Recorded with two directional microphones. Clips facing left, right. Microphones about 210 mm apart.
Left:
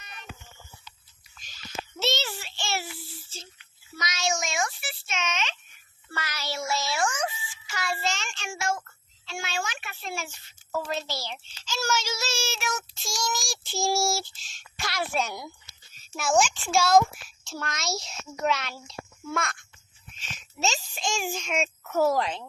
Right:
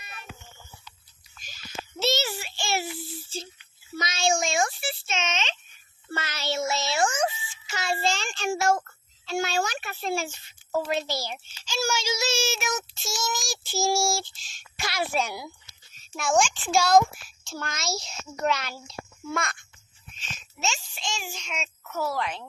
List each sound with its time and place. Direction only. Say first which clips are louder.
2.0 s child singing: right 3 dB; centre (ahead or behind); by 3.5 s 30° right (ahead or behind)
3.9 s a sound: right 4 dB; 30° right (ahead or behind)
6.1 s music: right 4 dB; 25° right (ahead or behind)
9.2 s a sound: right 7 dB; 40° right (ahead or behind)
10.8 s child singing: right 4 dB; 15° right (ahead or behind)
13.0 s child singing: right 1 dB; 5° right (ahead or behind)
15.4 s a child's voice: even; centre (ahead or behind)
20.6 s a sound: left 3 dB; 40° left (ahead or behind)
22.2 s speech: left 2 dB; 25° left (ahead or behind)